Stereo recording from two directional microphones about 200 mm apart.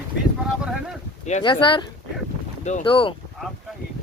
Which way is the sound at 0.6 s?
Centre (ahead or behind).